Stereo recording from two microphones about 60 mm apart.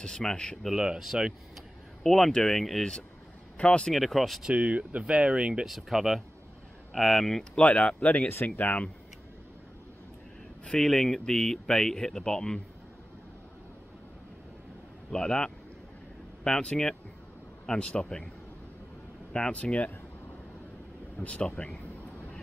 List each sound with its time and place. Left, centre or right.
0.0 s speech: centre
0.7 s speech: centre
2.0 s speech: centre
3.9 s speech: centre
4.6 s speech: right
5.7 s speech: centre
7.6 s speech: left
10.6 s speech: centre
15.0 s speech: centre
19.3 s speech: centre
21.2 s speech: centre